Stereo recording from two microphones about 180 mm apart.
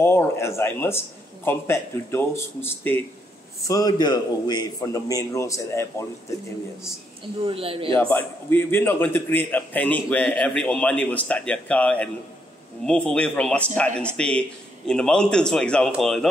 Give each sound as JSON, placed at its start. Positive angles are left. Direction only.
{"t": 0.0, "sound": "a man's voice", "side_deg": 15}
{"t": 7.4, "sound": "speech", "side_deg": -30}
{"t": 8.1, "sound": "a man's voice", "side_deg": 10}